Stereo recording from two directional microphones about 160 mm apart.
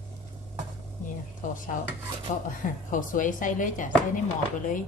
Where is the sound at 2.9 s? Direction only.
55° left (ahead or behind).